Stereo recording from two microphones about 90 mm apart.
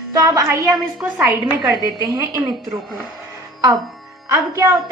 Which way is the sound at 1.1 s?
15° right (ahead or behind).